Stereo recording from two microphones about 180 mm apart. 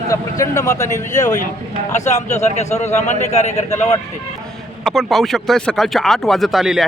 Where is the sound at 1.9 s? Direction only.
40° left (ahead or behind).